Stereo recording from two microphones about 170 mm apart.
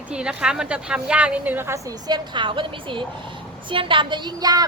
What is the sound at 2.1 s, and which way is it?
A woman's voice, 30° right (ahead or behind).